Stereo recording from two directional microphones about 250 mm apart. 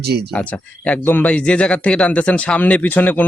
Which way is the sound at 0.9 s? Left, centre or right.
Centre.